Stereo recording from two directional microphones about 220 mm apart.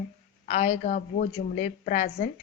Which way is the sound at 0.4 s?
30° left (ahead or behind).